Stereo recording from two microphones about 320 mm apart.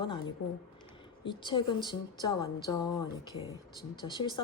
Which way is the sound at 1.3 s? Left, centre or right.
Centre.